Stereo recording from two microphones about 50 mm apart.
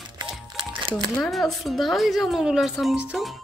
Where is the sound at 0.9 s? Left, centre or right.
Centre.